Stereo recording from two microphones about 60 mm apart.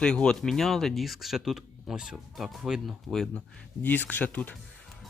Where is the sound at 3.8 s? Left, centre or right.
Left.